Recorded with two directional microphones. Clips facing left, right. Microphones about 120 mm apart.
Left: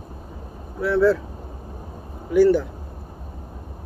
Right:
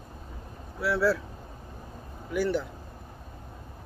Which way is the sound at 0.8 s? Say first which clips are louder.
Left 7 dB; 5° right (ahead or behind).